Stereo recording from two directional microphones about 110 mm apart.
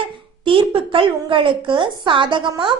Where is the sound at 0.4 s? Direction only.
55° right (ahead or behind).